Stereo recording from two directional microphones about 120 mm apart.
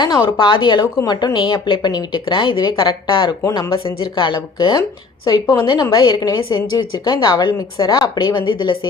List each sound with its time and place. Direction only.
0.0 s a woman's voice: 40° left (ahead or behind)
5.3 s a woman's voice: 30° left (ahead or behind)